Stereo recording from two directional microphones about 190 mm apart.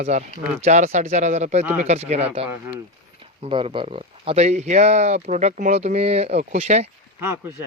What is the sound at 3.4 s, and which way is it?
Speech, 25° right (ahead or behind).